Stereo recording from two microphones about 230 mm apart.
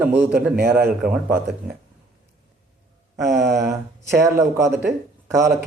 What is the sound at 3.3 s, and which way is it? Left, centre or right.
Speech, centre.